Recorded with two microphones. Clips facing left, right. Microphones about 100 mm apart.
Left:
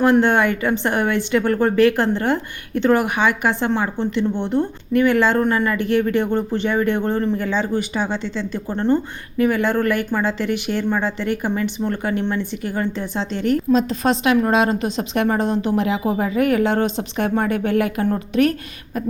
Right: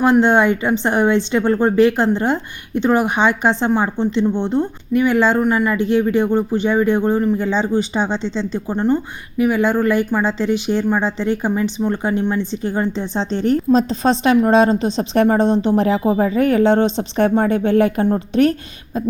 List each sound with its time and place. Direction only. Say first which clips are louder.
0.0 s a woman's voice: right 2 dB; 20° right (ahead or behind)
7.3 s a woman's voice: right 3 dB; 20° right (ahead or behind)